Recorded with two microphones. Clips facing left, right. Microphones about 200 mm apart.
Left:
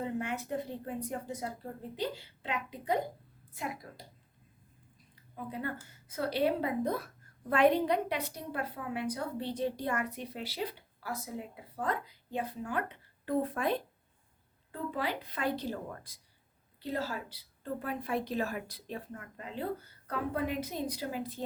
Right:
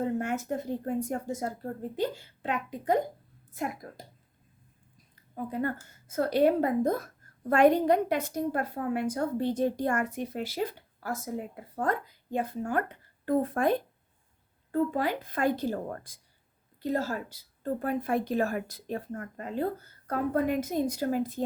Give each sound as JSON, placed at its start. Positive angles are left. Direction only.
{"t": 0.0, "sound": "a woman's voice", "side_deg": -45}
{"t": 5.3, "sound": "a woman's voice", "side_deg": -45}